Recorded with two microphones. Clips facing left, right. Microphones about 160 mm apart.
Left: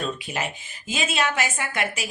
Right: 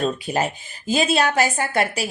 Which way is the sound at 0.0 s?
40° right (ahead or behind).